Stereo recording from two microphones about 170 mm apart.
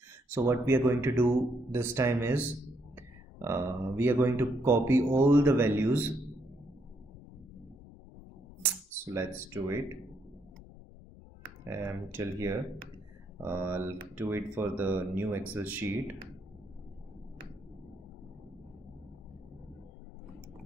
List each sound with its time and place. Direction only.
0.3 s speech: 15° right (ahead or behind)
9.0 s speech: 15° right (ahead or behind)
11.6 s speech: 15° right (ahead or behind)